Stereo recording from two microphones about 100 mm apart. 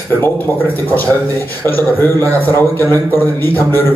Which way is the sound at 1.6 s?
20° left (ahead or behind).